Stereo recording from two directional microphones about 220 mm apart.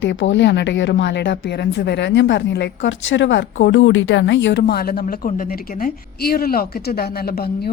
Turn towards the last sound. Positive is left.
turn(degrees=45)  # may be behind; listen again after turning